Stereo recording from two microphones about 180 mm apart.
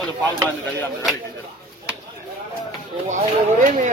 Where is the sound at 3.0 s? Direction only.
45° right (ahead or behind).